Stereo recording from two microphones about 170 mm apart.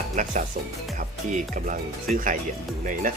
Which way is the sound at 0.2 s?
50° right (ahead or behind).